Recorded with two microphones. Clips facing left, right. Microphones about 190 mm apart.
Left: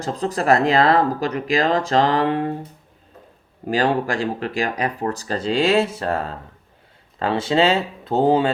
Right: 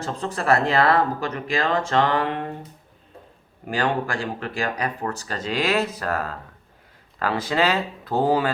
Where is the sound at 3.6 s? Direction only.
35° left (ahead or behind).